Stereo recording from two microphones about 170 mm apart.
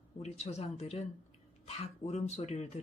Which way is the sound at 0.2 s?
40° left (ahead or behind).